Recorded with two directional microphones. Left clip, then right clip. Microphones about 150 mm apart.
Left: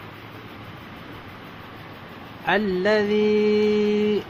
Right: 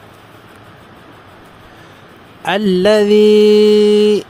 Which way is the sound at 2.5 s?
80° right.